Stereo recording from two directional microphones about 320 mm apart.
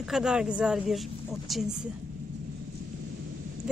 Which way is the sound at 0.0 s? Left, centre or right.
Centre.